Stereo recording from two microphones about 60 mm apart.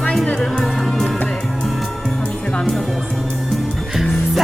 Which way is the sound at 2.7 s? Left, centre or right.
Centre.